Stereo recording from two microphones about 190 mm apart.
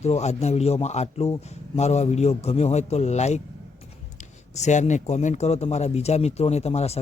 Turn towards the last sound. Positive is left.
turn(degrees=35)  # may be behind; listen again after turning